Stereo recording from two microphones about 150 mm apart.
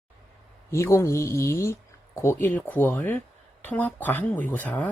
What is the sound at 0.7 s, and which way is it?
Speech, 20° left (ahead or behind).